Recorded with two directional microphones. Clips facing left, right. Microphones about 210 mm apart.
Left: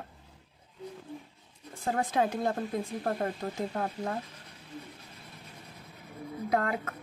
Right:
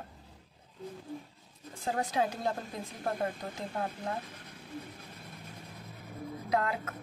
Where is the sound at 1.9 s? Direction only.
55° left (ahead or behind).